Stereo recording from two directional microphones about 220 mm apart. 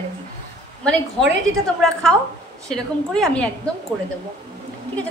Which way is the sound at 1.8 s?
Centre (ahead or behind).